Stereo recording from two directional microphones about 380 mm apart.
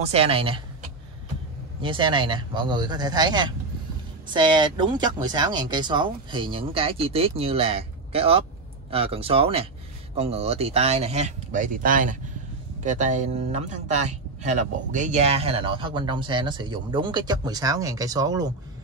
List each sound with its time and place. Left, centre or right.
0.0 s speech: centre
1.8 s speech: centre